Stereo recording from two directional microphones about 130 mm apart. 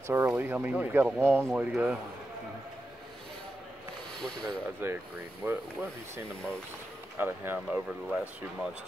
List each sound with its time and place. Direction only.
0.0 s speech: 20° right (ahead or behind)
4.2 s speech: 5° left (ahead or behind)
4.8 s speech: 15° right (ahead or behind)
7.2 s speech: 15° right (ahead or behind)